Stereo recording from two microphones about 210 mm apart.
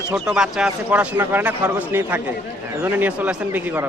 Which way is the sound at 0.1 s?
5° right (ahead or behind).